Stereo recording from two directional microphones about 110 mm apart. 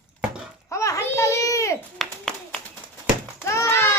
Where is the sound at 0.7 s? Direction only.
30° left (ahead or behind).